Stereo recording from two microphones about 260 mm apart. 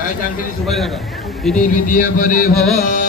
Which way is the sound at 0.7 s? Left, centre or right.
Centre.